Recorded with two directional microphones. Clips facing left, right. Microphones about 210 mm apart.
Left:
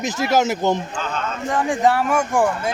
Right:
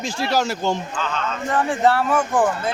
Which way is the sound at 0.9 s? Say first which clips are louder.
Even; 45° left (ahead or behind).